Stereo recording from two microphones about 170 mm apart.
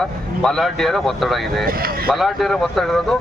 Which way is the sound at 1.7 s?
60° right (ahead or behind).